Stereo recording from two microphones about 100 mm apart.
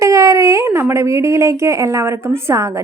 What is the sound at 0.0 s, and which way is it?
A woman's voice, 30° right (ahead or behind).